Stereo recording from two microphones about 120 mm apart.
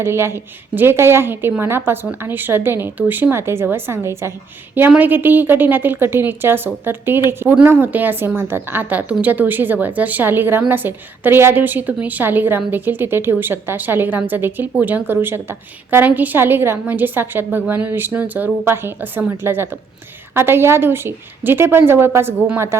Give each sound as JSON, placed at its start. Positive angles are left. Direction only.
{"t": 0.0, "sound": "a woman's voice", "side_deg": -20}